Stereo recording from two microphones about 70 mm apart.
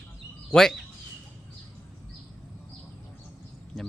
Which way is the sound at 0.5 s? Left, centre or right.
Centre.